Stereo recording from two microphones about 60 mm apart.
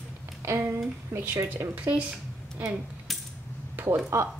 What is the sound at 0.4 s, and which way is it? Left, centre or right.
Speech, right.